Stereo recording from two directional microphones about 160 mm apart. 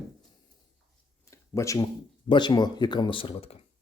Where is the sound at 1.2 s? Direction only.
20° left (ahead or behind).